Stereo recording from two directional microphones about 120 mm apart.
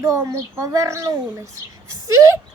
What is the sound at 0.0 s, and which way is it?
A child's voice, 25° right (ahead or behind).